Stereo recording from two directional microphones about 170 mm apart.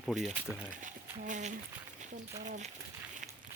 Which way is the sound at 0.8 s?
45° right (ahead or behind).